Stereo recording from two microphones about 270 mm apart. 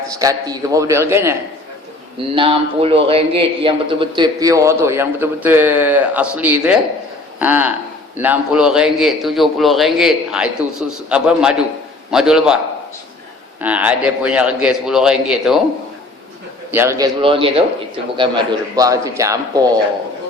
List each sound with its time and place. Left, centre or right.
0.2 s a man's voice: centre
2.3 s a man's voice: centre
13.6 s a man's voice: centre
16.7 s a man's voice: centre